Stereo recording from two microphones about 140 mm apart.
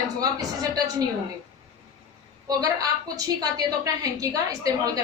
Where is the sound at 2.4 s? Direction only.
25° right (ahead or behind).